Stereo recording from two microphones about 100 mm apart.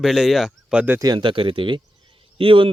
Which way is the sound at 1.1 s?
60° right (ahead or behind).